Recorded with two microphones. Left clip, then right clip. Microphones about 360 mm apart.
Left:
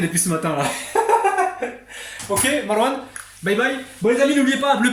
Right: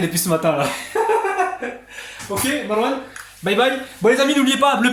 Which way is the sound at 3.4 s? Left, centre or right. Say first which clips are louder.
Right 1 dB; centre.